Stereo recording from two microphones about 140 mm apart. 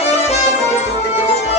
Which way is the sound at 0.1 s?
50° left (ahead or behind).